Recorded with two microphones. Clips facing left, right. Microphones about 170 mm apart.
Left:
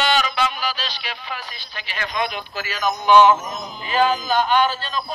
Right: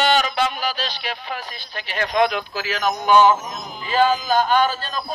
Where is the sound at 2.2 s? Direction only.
90° right.